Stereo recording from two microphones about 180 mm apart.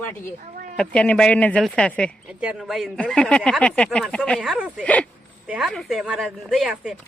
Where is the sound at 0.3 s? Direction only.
50° right (ahead or behind).